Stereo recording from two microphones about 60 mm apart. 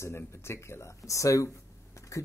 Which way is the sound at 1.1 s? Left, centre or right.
Left.